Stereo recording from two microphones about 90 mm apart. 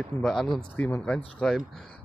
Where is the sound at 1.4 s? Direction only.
5° left (ahead or behind).